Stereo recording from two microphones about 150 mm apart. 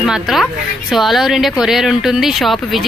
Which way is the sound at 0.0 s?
Centre (ahead or behind).